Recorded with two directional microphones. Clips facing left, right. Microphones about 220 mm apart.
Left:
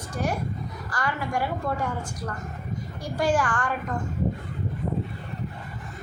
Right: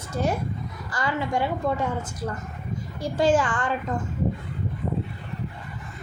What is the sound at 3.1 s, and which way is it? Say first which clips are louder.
Speech: right 3 dB; 20° right (ahead or behind).